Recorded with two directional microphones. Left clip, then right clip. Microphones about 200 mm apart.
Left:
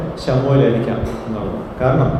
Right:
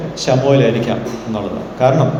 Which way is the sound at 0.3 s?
25° right (ahead or behind).